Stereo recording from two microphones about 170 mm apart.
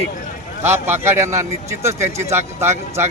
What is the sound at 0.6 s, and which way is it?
Speech, 15° right (ahead or behind).